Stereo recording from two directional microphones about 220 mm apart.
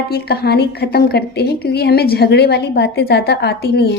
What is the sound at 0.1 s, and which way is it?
A woman's voice, 45° left (ahead or behind).